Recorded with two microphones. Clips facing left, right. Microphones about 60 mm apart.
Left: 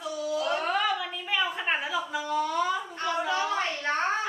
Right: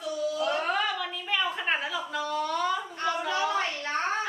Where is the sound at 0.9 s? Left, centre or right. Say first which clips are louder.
Left 1 dB; centre.